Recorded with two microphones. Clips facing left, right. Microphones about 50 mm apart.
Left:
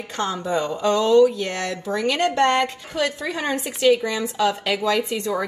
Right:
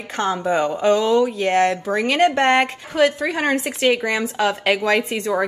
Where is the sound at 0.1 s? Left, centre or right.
Right.